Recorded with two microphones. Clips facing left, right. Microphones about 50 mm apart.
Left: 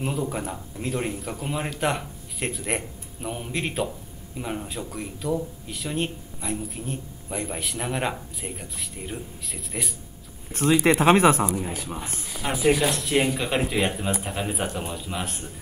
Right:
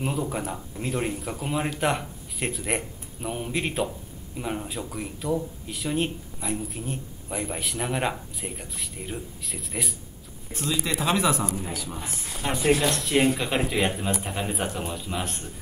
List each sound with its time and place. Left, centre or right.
0.0 s speech: centre
10.5 s speech: left
12.4 s speech: centre